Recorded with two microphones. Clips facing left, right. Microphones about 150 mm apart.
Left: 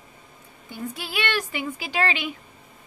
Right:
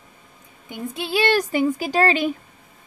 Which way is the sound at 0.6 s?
20° right (ahead or behind).